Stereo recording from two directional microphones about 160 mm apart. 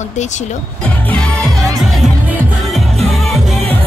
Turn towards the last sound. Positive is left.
turn(degrees=0)  # may be behind; listen again after turning